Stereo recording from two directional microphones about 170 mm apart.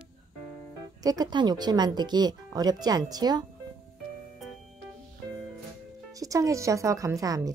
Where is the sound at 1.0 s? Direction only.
20° right (ahead or behind).